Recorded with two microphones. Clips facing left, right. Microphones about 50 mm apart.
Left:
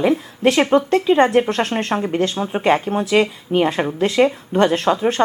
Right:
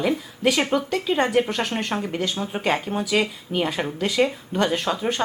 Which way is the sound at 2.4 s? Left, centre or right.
Left.